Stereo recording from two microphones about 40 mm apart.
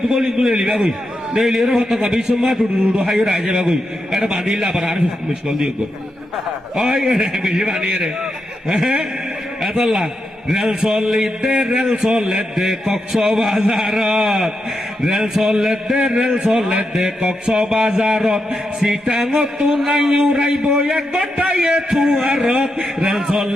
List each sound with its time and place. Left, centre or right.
0.1 s speech: centre
6.7 s a man's voice: centre
19.9 s a man's voice: right
22.6 s a man's voice: right